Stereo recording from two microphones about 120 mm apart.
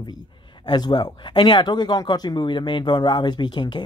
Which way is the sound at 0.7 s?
35° left (ahead or behind).